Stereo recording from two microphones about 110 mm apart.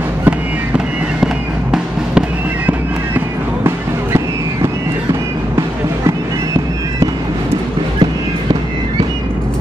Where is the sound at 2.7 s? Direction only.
20° right (ahead or behind).